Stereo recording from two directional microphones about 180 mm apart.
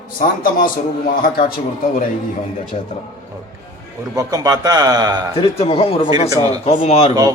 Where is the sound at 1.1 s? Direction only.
55° left (ahead or behind).